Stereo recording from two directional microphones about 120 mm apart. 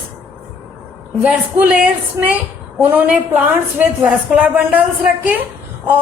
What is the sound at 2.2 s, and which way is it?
A woman's voice, 20° right (ahead or behind).